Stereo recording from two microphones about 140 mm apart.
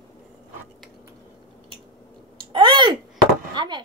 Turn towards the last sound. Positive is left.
turn(degrees=-35)  # may be behind; listen again after turning